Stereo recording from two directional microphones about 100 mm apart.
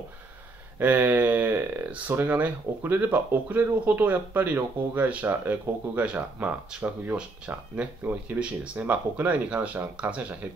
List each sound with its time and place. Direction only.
0.7 s speech: 20° right (ahead or behind)